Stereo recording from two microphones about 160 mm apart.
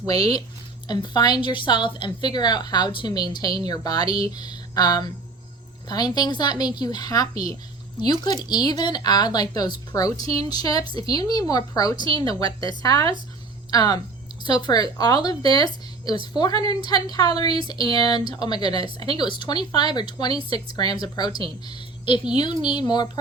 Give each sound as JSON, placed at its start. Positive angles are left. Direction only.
{"t": 0.0, "sound": "a woman's voice", "side_deg": 25}